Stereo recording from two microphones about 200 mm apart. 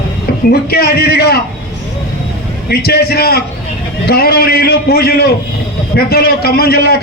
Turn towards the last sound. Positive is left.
turn(degrees=50)  # may be behind; listen again after turning